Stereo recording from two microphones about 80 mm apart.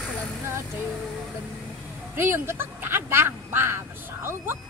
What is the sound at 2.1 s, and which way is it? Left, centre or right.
Speech, right.